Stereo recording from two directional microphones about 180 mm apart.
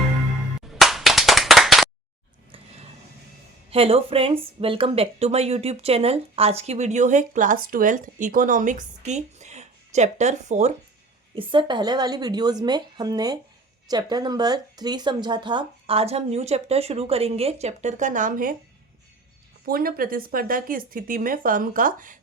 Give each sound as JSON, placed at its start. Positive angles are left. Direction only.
{"t": 0.8, "sound": "clapping", "side_deg": 0}
{"t": 2.5, "sound": "vehicle", "side_deg": -35}
{"t": 3.7, "sound": "speech", "side_deg": -35}
{"t": 11.3, "sound": "a woman's voice", "side_deg": -25}
{"t": 19.6, "sound": "speech", "side_deg": -55}